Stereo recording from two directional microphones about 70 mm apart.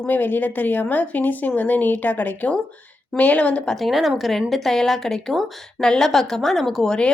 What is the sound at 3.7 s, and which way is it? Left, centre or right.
A woman's voice, centre.